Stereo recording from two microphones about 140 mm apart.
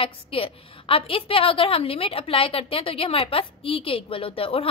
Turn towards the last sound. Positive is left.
turn(degrees=40)  # may be behind; listen again after turning